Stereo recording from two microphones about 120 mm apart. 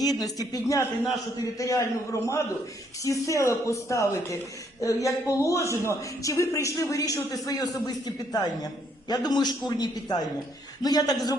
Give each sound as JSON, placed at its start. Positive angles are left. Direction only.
{"t": 0.0, "sound": "a man's voice", "side_deg": 30}